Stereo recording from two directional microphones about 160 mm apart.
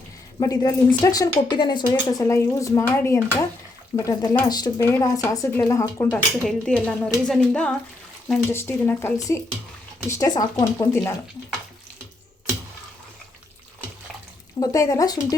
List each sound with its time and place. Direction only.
0.3 s speech: 25° left (ahead or behind)
14.6 s speech: 20° left (ahead or behind)